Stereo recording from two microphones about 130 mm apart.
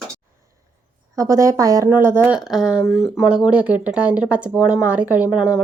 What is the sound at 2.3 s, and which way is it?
Speech, centre (ahead or behind).